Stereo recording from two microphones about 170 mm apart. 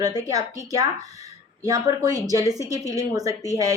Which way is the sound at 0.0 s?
20° right (ahead or behind).